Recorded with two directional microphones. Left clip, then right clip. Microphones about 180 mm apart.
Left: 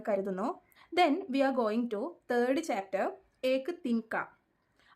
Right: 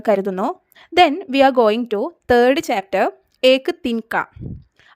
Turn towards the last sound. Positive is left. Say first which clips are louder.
# right 13 dB
turn(degrees=-60)  # may be behind; listen again after turning